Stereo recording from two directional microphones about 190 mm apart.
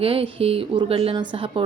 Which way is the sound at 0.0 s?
30° right (ahead or behind).